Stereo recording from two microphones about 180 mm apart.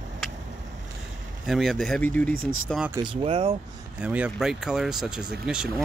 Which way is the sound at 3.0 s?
30° right (ahead or behind).